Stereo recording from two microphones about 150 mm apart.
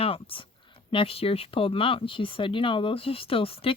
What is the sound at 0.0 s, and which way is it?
Speech, 40° left (ahead or behind).